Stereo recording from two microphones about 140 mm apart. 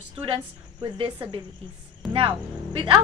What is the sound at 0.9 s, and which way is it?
A woman's voice, 40° right (ahead or behind).